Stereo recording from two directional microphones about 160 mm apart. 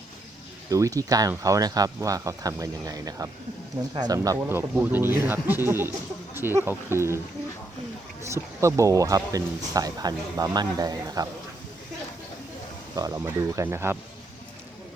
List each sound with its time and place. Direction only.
0.7 s speech: 20° right (ahead or behind)
8.3 s speech: 20° right (ahead or behind)
13.0 s speech: 20° right (ahead or behind)